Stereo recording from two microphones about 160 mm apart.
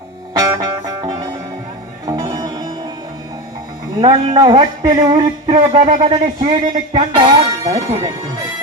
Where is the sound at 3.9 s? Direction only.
30° right (ahead or behind).